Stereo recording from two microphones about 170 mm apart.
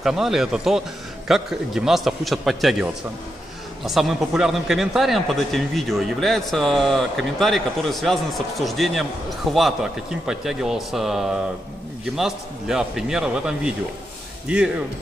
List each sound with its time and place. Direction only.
0.0 s speech: centre (ahead or behind)